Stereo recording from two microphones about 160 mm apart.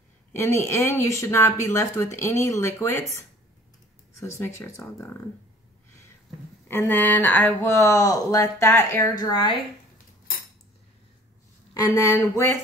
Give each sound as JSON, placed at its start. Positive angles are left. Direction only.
{"t": 0.3, "sound": "speech", "side_deg": 20}
{"t": 6.7, "sound": "speech", "side_deg": 15}
{"t": 11.7, "sound": "speech", "side_deg": 20}